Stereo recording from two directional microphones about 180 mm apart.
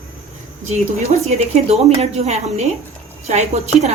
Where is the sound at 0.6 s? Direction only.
35° right (ahead or behind).